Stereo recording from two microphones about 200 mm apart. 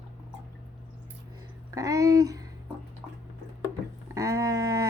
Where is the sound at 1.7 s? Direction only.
15° right (ahead or behind).